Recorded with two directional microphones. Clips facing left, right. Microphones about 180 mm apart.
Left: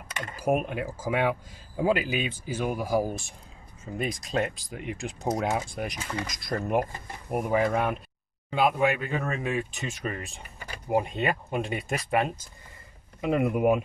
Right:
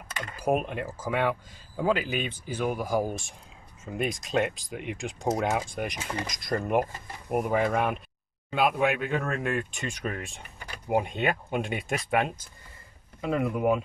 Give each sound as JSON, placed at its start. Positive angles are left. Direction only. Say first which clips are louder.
{"t": 0.4, "sound": "speech", "louder": "left 1 dB", "side_deg": 5}
{"t": 13.2, "sound": "speech", "louder": "left 2 dB", "side_deg": 15}